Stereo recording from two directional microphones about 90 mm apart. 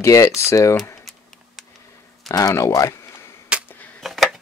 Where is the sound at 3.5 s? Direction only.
10° right (ahead or behind).